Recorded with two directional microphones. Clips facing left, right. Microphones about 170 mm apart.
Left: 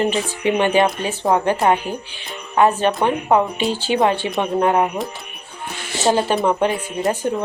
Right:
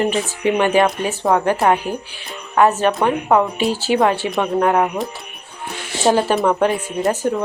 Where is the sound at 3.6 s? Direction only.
5° right (ahead or behind).